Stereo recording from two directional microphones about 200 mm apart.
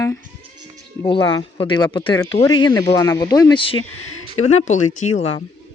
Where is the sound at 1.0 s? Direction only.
25° left (ahead or behind).